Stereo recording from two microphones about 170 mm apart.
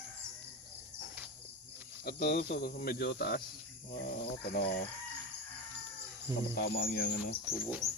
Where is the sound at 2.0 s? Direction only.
60° left (ahead or behind).